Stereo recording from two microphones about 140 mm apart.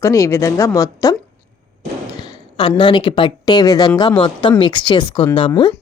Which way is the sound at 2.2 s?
35° left (ahead or behind).